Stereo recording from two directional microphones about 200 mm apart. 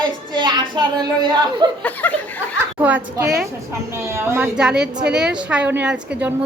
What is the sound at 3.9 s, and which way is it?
A woman's voice, 15° right (ahead or behind).